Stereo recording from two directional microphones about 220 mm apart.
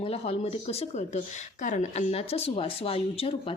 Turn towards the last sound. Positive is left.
turn(degrees=25)  # may be behind; listen again after turning